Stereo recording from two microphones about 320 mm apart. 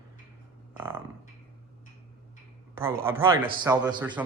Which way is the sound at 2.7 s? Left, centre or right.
Centre.